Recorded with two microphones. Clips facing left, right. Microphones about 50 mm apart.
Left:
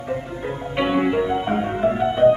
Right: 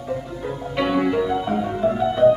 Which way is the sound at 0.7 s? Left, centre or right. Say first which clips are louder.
Even; left.